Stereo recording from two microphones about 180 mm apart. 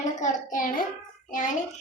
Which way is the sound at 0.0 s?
45° left (ahead or behind).